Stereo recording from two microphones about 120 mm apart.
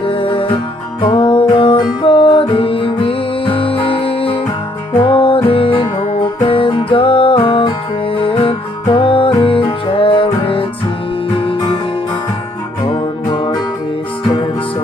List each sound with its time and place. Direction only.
0.0 s music: 50° left (ahead or behind)
12.9 s music: 50° left (ahead or behind)